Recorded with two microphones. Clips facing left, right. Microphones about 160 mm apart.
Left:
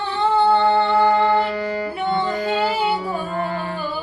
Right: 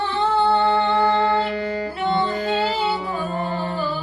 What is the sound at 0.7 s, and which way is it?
Music, 35° left (ahead or behind).